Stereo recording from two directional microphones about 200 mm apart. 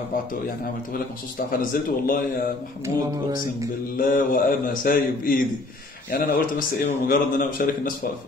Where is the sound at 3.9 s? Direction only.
45° left (ahead or behind).